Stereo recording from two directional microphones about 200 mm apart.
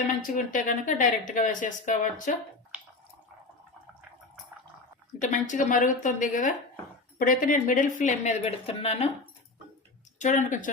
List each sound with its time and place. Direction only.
0.3 s speech: 40° left (ahead or behind)
2.7 s drip: 5° right (ahead or behind)
5.2 s speech: 40° left (ahead or behind)
10.2 s speech: 40° left (ahead or behind)